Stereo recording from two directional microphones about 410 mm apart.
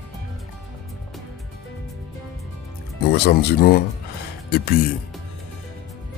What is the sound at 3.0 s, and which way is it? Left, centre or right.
Speech, left.